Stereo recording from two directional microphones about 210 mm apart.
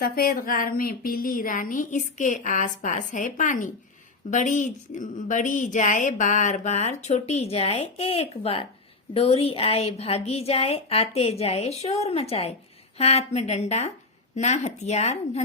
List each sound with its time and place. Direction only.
0.0 s a woman's voice: 45° left (ahead or behind)